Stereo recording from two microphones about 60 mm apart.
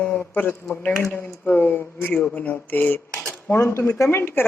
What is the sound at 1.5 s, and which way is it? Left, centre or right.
Speech, left.